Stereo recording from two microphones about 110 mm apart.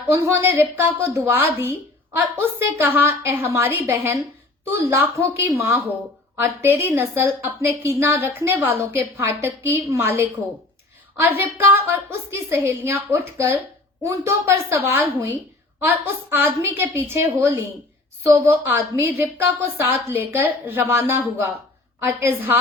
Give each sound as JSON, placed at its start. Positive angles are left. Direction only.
{"t": 0.1, "sound": "a woman's voice", "side_deg": -25}
{"t": 2.8, "sound": "a woman's voice", "side_deg": -20}